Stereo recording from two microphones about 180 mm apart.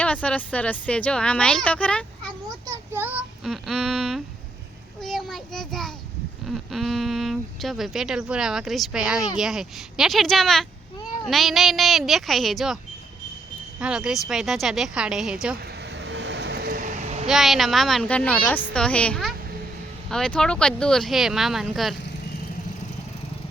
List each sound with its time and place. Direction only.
0.0 s speech: 5° left (ahead or behind)
2.6 s a child's voice: 10° right (ahead or behind)
4.9 s child singing: centre (ahead or behind)
6.5 s speech: centre (ahead or behind)
15.8 s vehicle: 70° right (ahead or behind); by 17.2 s 40° right (ahead or behind)
17.2 s speech: centre (ahead or behind)